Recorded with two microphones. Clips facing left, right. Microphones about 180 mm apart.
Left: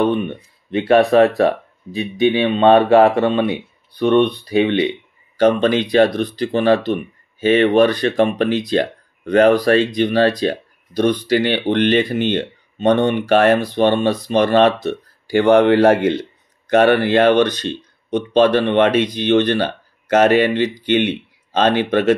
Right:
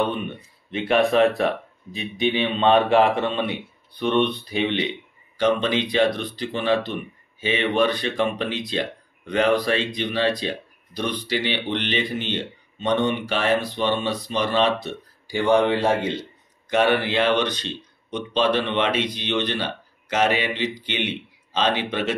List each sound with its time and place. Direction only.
0.7 s speech: 45° left (ahead or behind); by 16.1 s 80° left
16.7 s speech: 55° left (ahead or behind)